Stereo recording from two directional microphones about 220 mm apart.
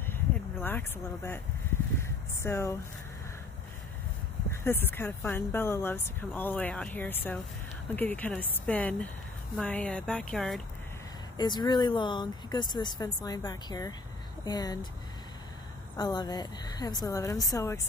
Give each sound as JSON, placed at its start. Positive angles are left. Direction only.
{"t": 0.6, "sound": "speech", "side_deg": 10}
{"t": 2.4, "sound": "speech", "side_deg": 10}
{"t": 4.5, "sound": "speech", "side_deg": 10}
{"t": 11.3, "sound": "speech", "side_deg": 20}
{"t": 16.0, "sound": "speech", "side_deg": 20}